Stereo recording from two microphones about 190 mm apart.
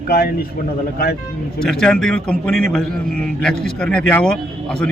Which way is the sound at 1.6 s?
Centre (ahead or behind).